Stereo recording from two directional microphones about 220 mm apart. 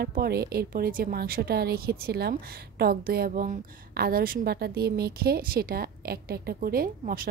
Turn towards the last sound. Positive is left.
turn(degrees=-40)  # may be behind; listen again after turning